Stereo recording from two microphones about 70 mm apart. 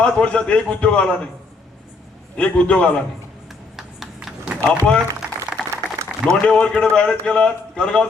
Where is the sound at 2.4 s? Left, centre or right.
Centre.